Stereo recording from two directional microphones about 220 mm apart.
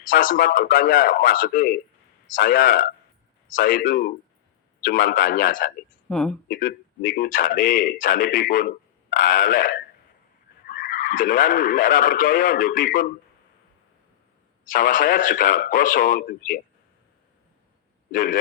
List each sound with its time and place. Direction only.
0.1 s a man's voice: 40° left (ahead or behind)
6.1 s speech: 5° left (ahead or behind)
6.5 s a man's voice: 40° left (ahead or behind)
14.6 s a man's voice: 40° left (ahead or behind)
18.1 s a man's voice: 40° left (ahead or behind)